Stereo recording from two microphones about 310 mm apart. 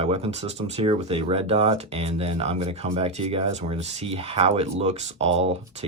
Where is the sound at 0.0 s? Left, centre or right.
Centre.